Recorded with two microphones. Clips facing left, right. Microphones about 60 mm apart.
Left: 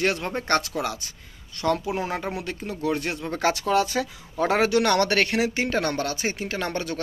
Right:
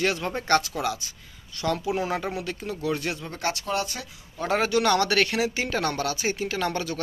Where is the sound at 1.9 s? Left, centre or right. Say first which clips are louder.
Right 1 dB; left.